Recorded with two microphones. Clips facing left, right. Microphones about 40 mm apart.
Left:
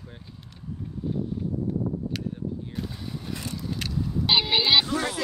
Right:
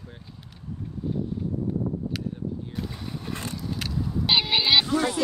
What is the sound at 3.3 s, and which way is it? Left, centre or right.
Vehicle, right.